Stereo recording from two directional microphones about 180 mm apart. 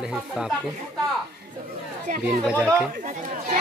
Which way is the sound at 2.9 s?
45° right (ahead or behind).